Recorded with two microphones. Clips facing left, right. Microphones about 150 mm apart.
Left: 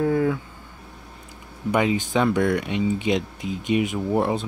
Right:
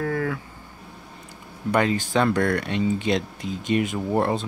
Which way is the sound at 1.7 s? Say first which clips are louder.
Even; 10° left (ahead or behind).